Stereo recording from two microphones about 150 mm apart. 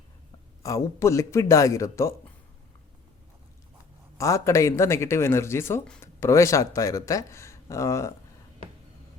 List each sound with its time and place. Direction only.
0.6 s speech: 20° left (ahead or behind)
4.2 s speech: 20° left (ahead or behind)